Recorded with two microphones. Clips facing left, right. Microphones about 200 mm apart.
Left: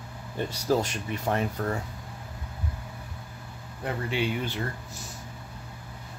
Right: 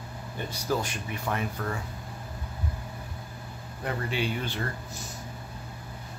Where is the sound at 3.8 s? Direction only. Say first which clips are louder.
Left 1 dB; 20° left (ahead or behind).